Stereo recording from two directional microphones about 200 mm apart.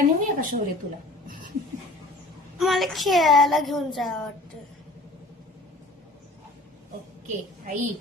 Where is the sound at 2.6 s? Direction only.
Centre (ahead or behind).